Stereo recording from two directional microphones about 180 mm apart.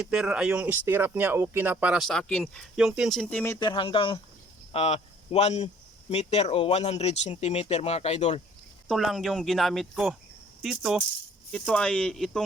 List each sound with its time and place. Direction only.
0.0 s speech: 5° right (ahead or behind)
3.6 s speech: 25° left (ahead or behind)
8.9 s speech: centre (ahead or behind)